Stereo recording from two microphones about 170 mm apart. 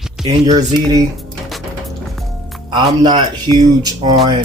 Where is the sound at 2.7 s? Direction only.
25° right (ahead or behind).